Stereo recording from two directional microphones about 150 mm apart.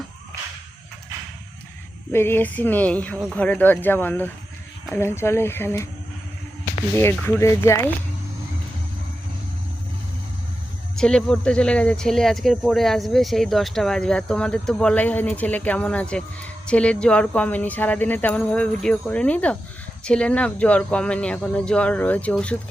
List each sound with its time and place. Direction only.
2.1 s speech: 15° left (ahead or behind)
6.9 s speech: 15° left (ahead or behind)
10.9 s speech: 5° left (ahead or behind)